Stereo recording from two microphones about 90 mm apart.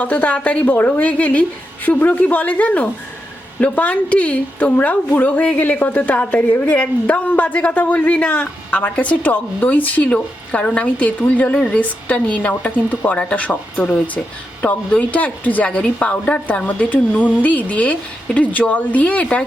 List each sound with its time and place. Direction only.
0.0 s a woman's voice: 15° left (ahead or behind)